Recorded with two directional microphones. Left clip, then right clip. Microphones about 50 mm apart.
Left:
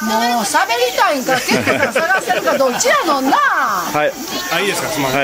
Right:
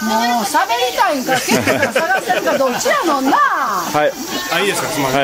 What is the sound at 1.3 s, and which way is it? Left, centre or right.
Speech, centre.